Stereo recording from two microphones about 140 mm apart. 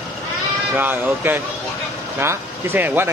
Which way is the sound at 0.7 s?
15° right (ahead or behind).